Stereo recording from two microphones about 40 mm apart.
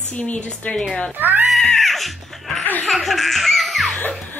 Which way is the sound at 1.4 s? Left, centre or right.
Centre.